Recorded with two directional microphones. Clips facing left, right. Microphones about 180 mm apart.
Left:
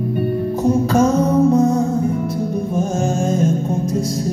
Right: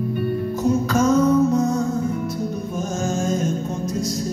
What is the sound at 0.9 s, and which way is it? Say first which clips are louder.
Music: even; 30° left (ahead or behind).